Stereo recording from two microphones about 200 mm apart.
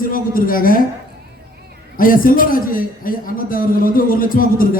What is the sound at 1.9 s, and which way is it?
A man's voice, 45° left (ahead or behind).